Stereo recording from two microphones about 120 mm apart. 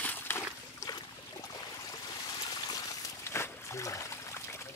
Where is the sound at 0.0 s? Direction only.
15° left (ahead or behind).